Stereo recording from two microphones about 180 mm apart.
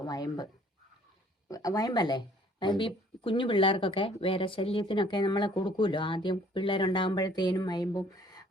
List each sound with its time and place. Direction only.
0.0 s speech: 20° left (ahead or behind)
1.5 s speech: 20° left (ahead or behind)